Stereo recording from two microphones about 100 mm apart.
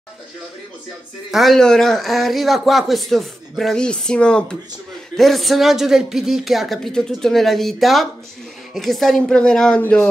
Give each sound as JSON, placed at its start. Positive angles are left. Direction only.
{"t": 1.3, "sound": "a man's voice", "side_deg": 0}